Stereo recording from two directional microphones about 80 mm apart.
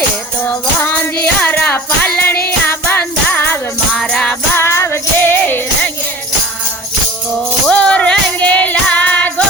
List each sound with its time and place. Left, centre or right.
0.4 s music: left
3.9 s music: centre
4.5 s music: left
7.7 s female singing: centre